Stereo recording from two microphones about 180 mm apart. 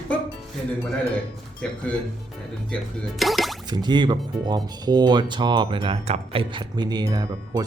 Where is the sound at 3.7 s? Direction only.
25° right (ahead or behind).